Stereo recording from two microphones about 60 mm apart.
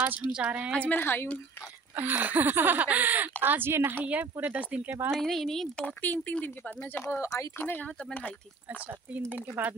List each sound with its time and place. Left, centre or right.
0.3 s a woman's voice: centre
0.9 s speech: left
2.0 s speech: right
4.0 s speech: right
5.1 s speech: centre
5.8 s speech: left
7.2 s speech: left
7.5 s speech: left
7.8 s speech: left
8.7 s speech: right